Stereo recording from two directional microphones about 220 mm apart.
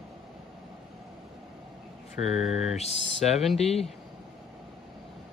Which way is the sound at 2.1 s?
30° left (ahead or behind).